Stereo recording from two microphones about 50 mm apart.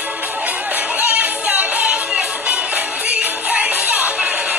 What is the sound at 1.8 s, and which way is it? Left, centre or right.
Music, centre.